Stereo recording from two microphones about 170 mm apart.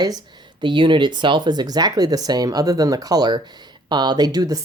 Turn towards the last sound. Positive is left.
turn(degrees=-20)  # may be behind; listen again after turning